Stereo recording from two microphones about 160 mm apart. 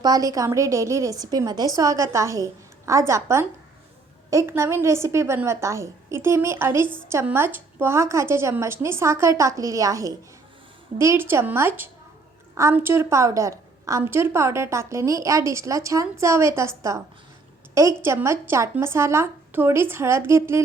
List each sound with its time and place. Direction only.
0.0 s a woman's voice: 25° right (ahead or behind)
18.0 s a woman's voice: 15° right (ahead or behind)